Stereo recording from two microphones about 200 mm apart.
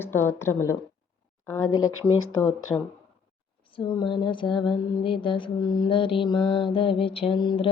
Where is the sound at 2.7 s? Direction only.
10° left (ahead or behind).